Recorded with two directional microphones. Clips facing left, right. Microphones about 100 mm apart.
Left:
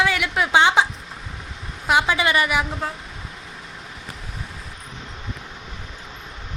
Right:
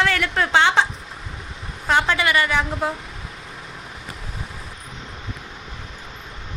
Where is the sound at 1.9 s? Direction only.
15° left (ahead or behind).